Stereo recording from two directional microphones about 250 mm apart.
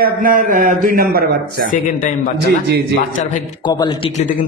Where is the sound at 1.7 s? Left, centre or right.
Left.